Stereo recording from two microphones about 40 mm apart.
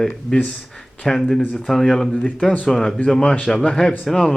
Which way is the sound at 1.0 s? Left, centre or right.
Centre.